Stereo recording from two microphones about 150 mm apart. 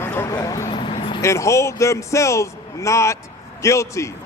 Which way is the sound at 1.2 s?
20° left (ahead or behind).